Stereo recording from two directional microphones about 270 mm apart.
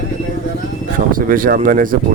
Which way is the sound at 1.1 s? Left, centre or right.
Right.